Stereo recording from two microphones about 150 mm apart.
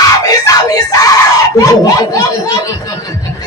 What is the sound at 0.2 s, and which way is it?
Screaming, 25° left (ahead or behind).